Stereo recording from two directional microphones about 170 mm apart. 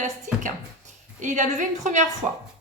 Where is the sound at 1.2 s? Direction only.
45° right (ahead or behind).